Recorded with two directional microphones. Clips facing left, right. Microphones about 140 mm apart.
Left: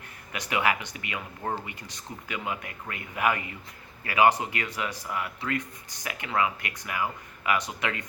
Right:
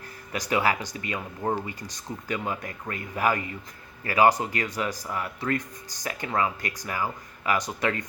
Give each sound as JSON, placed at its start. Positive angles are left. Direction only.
{"t": 0.3, "sound": "speech", "side_deg": -35}
{"t": 1.4, "sound": "speech", "side_deg": -20}
{"t": 1.6, "sound": "speech", "side_deg": -40}